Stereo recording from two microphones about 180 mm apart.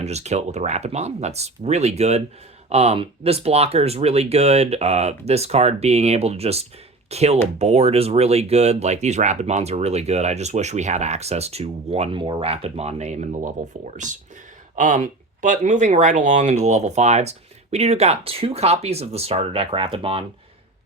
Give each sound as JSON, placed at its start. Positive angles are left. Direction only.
{"t": 0.0, "sound": "speech", "side_deg": -35}